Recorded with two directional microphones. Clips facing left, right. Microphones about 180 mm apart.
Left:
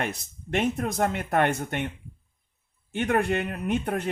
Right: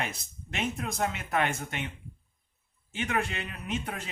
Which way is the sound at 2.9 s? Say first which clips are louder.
Left 7 dB; 60° left (ahead or behind).